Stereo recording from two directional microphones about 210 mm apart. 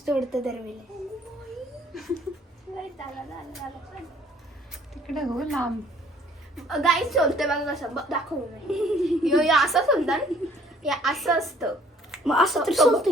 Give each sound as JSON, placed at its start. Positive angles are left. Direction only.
{"t": 0.0, "sound": "a woman's voice", "side_deg": 0}
{"t": 1.9, "sound": "a sound", "side_deg": 0}
{"t": 5.0, "sound": "a woman's voice", "side_deg": 0}